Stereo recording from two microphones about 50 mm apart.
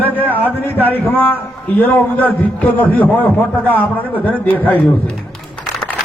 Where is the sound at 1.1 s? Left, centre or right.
Left.